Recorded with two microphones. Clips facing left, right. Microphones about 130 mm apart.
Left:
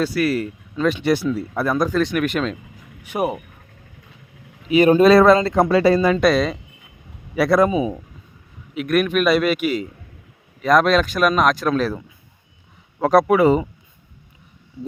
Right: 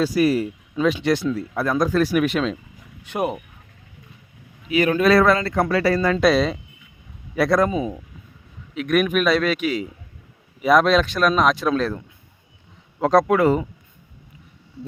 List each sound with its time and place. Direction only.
0.0 s speech: 15° right (ahead or behind)
1.0 s speech: 5° left (ahead or behind)
3.0 s a man's voice: 10° left (ahead or behind)
4.7 s speech: 25° left (ahead or behind)
6.1 s a man's voice: centre (ahead or behind)